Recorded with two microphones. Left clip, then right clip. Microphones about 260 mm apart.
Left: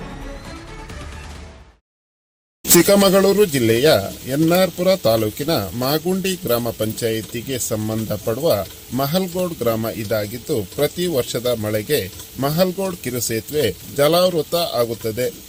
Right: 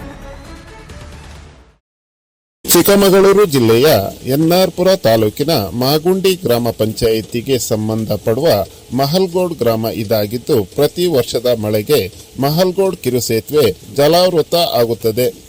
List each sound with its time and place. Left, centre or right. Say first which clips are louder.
2.7 s speech: right 4 dB; right